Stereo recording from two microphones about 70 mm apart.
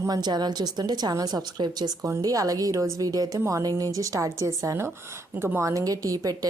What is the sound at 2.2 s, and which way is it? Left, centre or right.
A woman's voice, right.